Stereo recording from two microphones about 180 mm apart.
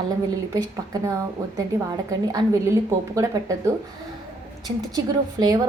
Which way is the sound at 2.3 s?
20° right (ahead or behind).